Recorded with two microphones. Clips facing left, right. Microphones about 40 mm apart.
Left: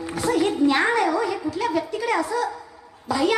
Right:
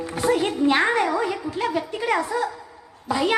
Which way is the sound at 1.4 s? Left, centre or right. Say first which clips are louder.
Left 1 dB; right.